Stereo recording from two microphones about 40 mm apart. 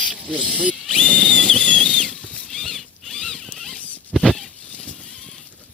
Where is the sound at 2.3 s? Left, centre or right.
Left.